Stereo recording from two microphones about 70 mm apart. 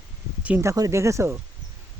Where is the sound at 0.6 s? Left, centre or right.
Right.